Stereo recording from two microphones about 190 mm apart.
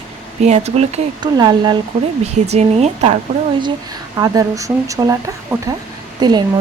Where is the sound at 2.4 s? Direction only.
35° right (ahead or behind).